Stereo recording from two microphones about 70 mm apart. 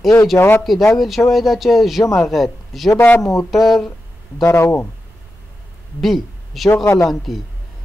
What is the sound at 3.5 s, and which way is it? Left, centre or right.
Speech, centre.